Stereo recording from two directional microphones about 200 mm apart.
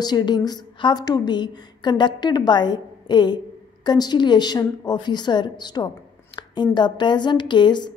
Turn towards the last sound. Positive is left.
turn(degrees=20)  # may be behind; listen again after turning